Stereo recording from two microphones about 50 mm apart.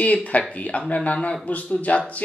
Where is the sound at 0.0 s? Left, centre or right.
Left.